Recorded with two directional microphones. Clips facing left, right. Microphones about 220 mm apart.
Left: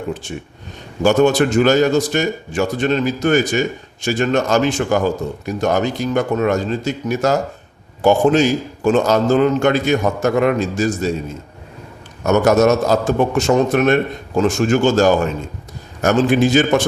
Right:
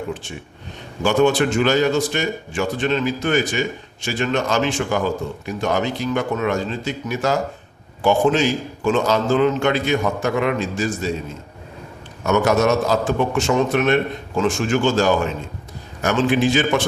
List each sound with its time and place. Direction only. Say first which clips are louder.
1.0 s a man's voice: left 3 dB; 40° left (ahead or behind)
12.2 s a man's voice: left 4 dB; 40° left (ahead or behind)